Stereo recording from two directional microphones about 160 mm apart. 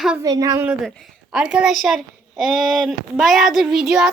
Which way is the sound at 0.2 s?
20° right (ahead or behind).